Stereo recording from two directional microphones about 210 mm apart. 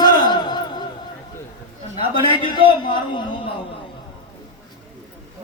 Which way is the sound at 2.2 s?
20° left (ahead or behind).